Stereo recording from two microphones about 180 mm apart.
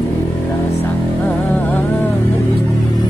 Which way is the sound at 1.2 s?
10° left (ahead or behind).